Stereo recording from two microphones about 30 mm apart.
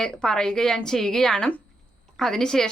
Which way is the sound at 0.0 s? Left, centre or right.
Left.